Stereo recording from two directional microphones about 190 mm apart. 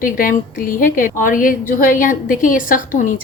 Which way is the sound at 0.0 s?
50° left (ahead or behind).